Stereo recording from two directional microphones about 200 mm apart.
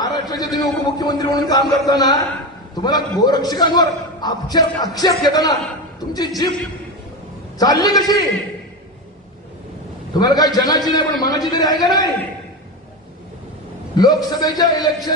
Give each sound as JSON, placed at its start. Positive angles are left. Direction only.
{"t": 0.0, "sound": "a sound", "side_deg": 20}
{"t": 0.9, "sound": "a man's voice", "side_deg": 20}
{"t": 7.5, "sound": "a man's voice", "side_deg": 20}
{"t": 10.1, "sound": "a man's voice", "side_deg": 20}
{"t": 13.9, "sound": "a man's voice", "side_deg": 20}